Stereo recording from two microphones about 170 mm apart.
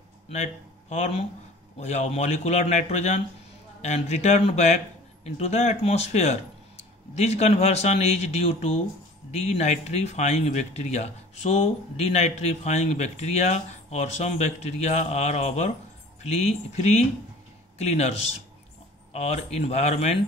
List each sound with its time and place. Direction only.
0.3 s speech: 40° left (ahead or behind)
19.1 s speech: 40° left (ahead or behind)